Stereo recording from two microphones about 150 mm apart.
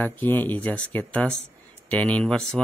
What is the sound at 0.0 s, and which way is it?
Speech, 10° left (ahead or behind).